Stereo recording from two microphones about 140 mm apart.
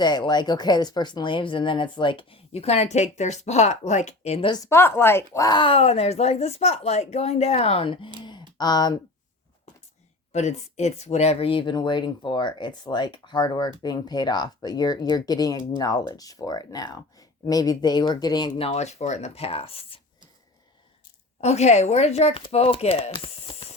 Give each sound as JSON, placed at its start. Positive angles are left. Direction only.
{"t": 0.0, "sound": "speech", "side_deg": 30}
{"t": 4.4, "sound": "speech", "side_deg": 30}
{"t": 4.7, "sound": "speech", "side_deg": 15}
{"t": 8.2, "sound": "a sound", "side_deg": 30}
{"t": 10.3, "sound": "speech", "side_deg": 55}
{"t": 21.4, "sound": "speech", "side_deg": 50}